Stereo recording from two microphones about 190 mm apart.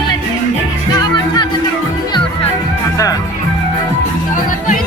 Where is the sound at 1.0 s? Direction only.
20° left (ahead or behind).